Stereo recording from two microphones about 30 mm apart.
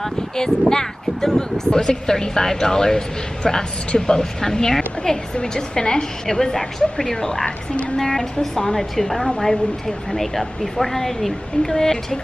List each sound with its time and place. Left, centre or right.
0.0 s a woman's voice: centre